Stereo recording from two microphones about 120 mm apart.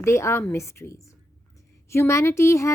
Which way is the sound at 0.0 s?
20° left (ahead or behind).